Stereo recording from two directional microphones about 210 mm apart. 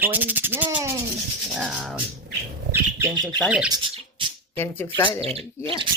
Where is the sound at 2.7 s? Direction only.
10° right (ahead or behind).